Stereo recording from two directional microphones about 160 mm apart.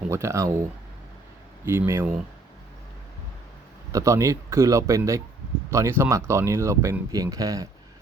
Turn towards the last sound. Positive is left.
turn(degrees=-20)  # may be behind; listen again after turning